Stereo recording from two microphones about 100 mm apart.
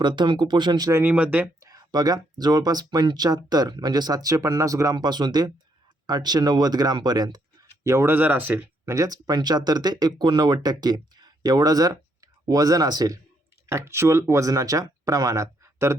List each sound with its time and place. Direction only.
0.0 s speech: 50° right (ahead or behind)
1.0 s speech: 15° right (ahead or behind)
1.6 s speech: 40° right (ahead or behind)
7.9 s speech: 25° right (ahead or behind)
8.9 s speech: 35° right (ahead or behind)
13.7 s speech: 25° right (ahead or behind)